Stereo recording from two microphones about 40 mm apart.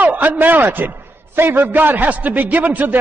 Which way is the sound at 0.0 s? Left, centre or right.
Right.